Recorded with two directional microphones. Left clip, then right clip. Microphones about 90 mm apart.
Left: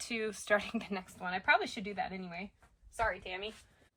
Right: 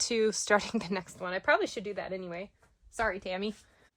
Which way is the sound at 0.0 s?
65° right (ahead or behind).